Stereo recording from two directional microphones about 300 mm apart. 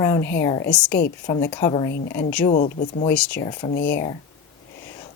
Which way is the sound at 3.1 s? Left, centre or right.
Centre.